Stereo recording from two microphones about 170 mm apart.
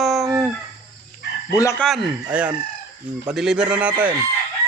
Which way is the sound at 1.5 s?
20° left (ahead or behind).